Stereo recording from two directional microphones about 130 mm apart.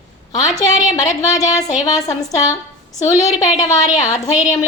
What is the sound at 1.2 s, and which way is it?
Speech, 30° left (ahead or behind).